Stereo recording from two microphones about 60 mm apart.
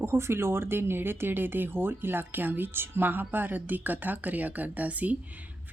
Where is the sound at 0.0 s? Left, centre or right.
Right.